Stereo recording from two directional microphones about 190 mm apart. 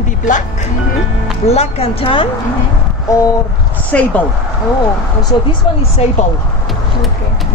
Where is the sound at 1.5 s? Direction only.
30° left (ahead or behind).